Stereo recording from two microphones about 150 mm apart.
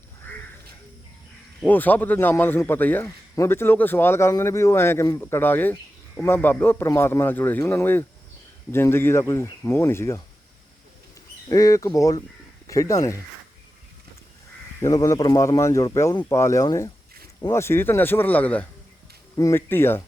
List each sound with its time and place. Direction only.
1.6 s a man's voice: 10° left (ahead or behind)
11.4 s speech: 20° left (ahead or behind)
14.8 s a man's voice: 20° left (ahead or behind)